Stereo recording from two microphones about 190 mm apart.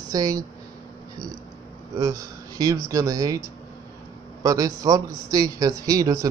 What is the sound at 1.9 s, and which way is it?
Speech, 20° right (ahead or behind).